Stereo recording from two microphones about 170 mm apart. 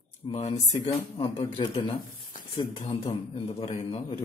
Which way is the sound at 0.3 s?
40° left (ahead or behind).